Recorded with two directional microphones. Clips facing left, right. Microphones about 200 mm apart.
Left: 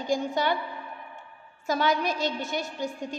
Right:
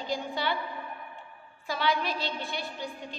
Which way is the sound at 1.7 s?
45° left (ahead or behind).